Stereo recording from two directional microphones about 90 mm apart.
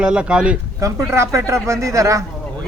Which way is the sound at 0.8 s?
30° right (ahead or behind).